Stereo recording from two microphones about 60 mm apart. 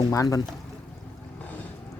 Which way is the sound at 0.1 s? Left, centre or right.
Left.